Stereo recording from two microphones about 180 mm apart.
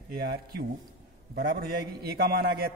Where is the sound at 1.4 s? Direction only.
55° right (ahead or behind).